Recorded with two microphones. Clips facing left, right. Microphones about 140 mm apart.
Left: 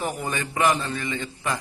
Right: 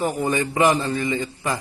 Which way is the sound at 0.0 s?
15° right (ahead or behind).